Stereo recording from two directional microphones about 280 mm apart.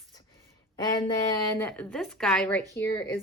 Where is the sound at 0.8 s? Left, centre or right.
Centre.